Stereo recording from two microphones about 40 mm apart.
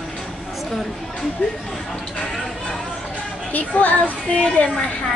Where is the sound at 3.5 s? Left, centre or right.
Left.